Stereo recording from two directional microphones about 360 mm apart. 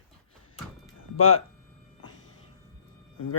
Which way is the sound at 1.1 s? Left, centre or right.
Left.